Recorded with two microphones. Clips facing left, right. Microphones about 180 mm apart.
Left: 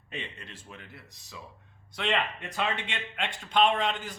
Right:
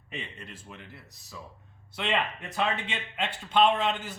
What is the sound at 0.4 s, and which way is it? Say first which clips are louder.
A man's voice: right 1 dB; centre (ahead or behind).